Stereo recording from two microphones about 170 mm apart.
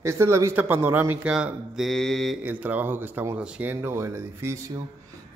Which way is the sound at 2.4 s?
10° right (ahead or behind).